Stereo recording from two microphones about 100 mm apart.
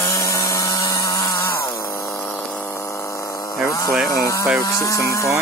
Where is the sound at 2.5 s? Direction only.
20° left (ahead or behind); by 3.5 s 35° left (ahead or behind).